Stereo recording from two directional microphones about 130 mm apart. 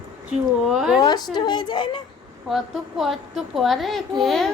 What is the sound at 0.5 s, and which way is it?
Speech, 5° right (ahead or behind).